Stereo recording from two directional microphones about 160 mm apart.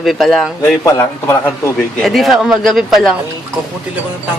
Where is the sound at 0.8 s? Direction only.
15° left (ahead or behind); by 3.1 s centre (ahead or behind).